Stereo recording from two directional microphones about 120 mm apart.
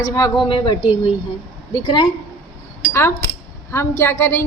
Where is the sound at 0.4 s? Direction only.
40° left (ahead or behind).